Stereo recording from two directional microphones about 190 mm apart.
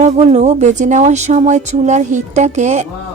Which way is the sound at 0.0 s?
35° right (ahead or behind).